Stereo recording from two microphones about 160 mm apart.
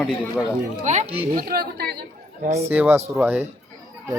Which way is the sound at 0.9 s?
40° right (ahead or behind).